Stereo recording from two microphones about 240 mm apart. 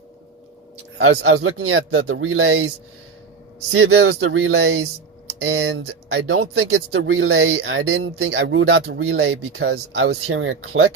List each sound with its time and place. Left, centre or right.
0.9 s speech: right
1.4 s speech: right
3.7 s speech: right
5.8 s speech: right
6.5 s speech: right